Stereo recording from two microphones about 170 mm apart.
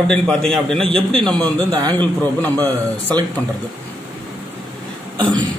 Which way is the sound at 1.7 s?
25° right (ahead or behind).